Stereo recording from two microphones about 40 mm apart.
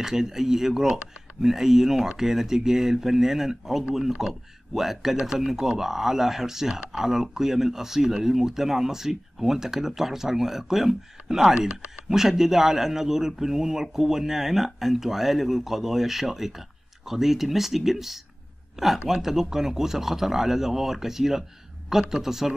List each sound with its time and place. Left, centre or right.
0.0 s a man's voice: centre